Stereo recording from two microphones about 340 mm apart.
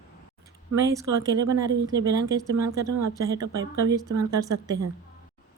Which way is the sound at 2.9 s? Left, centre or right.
Right.